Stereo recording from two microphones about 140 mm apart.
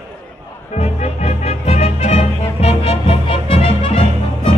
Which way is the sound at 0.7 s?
50° left (ahead or behind).